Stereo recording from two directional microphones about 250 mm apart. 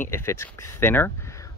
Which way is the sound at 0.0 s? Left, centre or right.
Centre.